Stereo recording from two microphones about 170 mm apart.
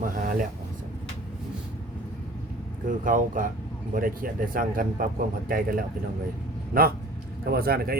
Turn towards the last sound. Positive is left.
turn(degrees=-65)  # may be behind; listen again after turning